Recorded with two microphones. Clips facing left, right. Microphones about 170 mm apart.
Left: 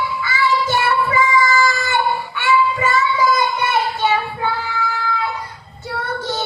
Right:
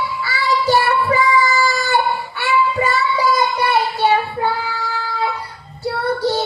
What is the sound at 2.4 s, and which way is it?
Music, 35° right (ahead or behind).